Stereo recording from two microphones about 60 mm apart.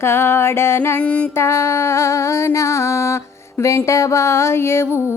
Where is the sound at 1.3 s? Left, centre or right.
Left.